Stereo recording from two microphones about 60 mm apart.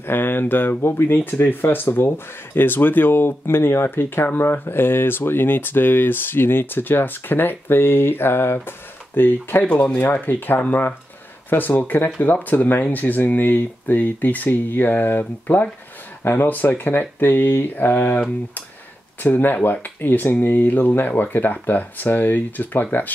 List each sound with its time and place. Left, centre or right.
0.0 s speech: left
19.2 s speech: left